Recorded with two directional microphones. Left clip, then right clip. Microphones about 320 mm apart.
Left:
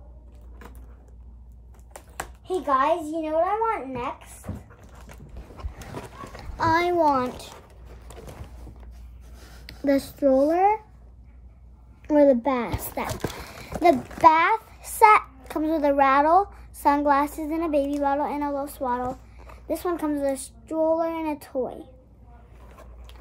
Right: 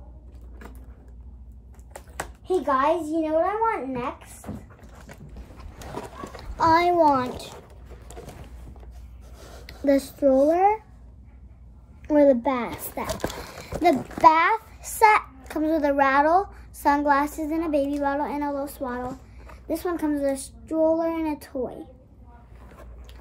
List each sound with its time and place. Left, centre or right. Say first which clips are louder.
2.0 s a sound: right 1 dB; centre
9.8 s a child's voice: right 1 dB; centre
12.1 s a child's voice: even; centre
13.0 s speech: right 4 dB; centre
13.6 s horse: left 2 dB; centre
14.2 s a child's voice: even; centre
22.7 s vehicle: even; centre